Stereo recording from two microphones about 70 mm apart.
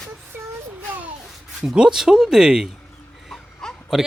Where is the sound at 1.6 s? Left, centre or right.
Centre.